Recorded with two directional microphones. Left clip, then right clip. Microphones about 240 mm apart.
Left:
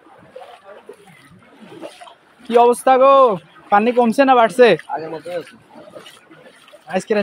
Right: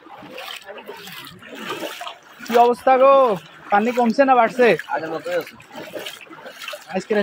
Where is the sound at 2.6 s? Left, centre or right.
Left.